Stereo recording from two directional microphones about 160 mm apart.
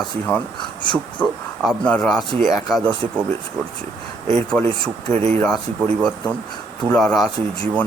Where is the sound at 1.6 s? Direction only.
5° left (ahead or behind).